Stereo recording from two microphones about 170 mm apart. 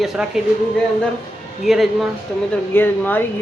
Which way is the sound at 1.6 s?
Centre (ahead or behind).